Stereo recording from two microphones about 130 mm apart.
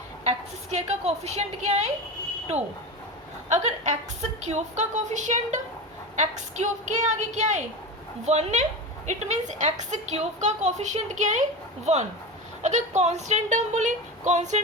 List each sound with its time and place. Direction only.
0.3 s a woman's voice: 55° right (ahead or behind)
3.5 s a woman's voice: 65° right (ahead or behind)
11.9 s a woman's voice: 55° right (ahead or behind)